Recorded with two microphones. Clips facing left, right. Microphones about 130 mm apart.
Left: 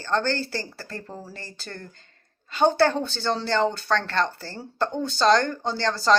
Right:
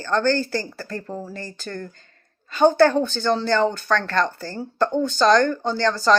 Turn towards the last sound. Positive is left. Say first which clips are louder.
# right 3 dB
turn(degrees=30)  # may be behind; listen again after turning